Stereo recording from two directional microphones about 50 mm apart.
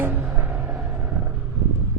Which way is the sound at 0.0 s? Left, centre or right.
Right.